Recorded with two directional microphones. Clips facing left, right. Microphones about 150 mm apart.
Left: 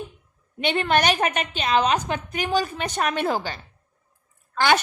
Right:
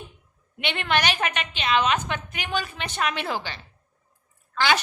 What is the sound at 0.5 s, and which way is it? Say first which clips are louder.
A woman's voice: left 4 dB; 40° left (ahead or behind).